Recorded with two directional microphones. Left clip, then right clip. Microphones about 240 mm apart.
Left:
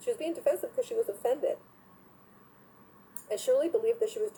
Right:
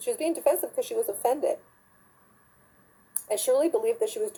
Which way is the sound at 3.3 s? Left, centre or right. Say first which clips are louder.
Right 3 dB; right.